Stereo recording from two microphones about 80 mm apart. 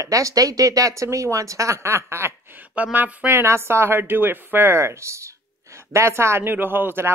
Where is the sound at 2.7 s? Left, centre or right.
Right.